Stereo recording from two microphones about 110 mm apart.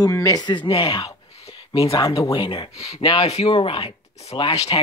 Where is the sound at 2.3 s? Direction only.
55° left (ahead or behind).